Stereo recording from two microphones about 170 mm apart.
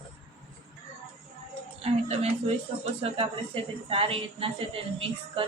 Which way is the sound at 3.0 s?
35° right (ahead or behind).